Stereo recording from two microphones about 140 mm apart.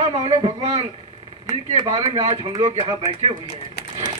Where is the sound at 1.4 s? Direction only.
25° right (ahead or behind).